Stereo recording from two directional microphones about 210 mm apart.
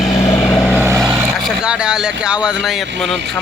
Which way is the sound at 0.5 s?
5° left (ahead or behind).